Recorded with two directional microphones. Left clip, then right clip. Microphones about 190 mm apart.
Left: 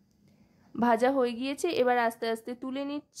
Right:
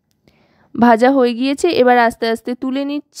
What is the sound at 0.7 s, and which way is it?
A woman's voice, 45° right (ahead or behind).